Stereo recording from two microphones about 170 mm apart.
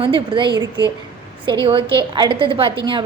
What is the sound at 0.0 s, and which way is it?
A woman's voice, 30° right (ahead or behind).